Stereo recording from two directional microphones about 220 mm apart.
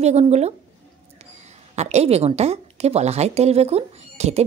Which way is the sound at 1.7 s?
30° right (ahead or behind).